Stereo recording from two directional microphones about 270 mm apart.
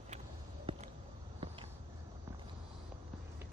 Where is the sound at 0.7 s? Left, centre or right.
Centre.